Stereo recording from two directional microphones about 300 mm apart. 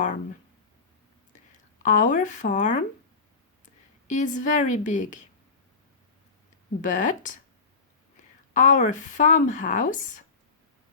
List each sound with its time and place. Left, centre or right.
1.8 s a woman's voice: left
4.0 s a woman's voice: left
6.8 s a woman's voice: left